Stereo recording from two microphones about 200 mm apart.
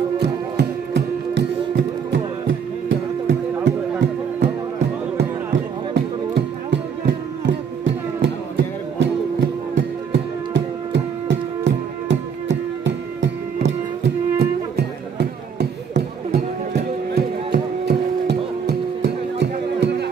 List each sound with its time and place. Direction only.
0.2 s music: 60° right (ahead or behind)
5.9 s music: 60° right (ahead or behind)
14.4 s music: 55° right (ahead or behind)